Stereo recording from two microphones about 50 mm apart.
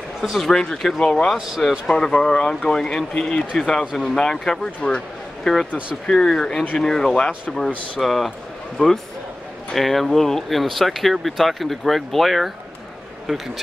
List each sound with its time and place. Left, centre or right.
0.2 s a man's voice: centre